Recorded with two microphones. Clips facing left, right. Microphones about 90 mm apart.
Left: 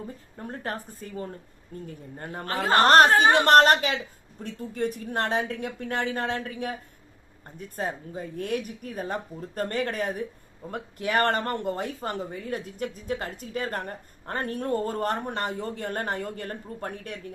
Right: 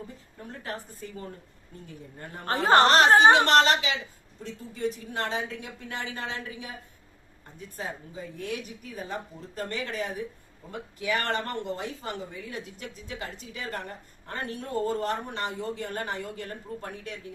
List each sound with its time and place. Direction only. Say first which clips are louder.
0.3 s speech: left 4 dB; 45° left (ahead or behind)
2.1 s speech: even; 45° left (ahead or behind)
7.8 s speech: left 5 dB; 50° left (ahead or behind)